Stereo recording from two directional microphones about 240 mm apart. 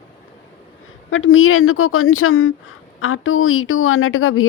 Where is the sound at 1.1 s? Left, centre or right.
Left.